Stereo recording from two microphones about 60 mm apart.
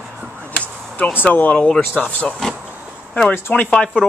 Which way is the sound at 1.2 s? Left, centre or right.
Left.